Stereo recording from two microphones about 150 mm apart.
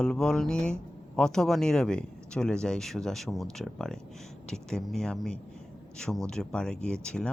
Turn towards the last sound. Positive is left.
turn(degrees=5)  # may be behind; listen again after turning